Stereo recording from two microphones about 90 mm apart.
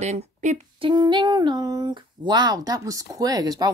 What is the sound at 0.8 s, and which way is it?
Speech, 60° right (ahead or behind).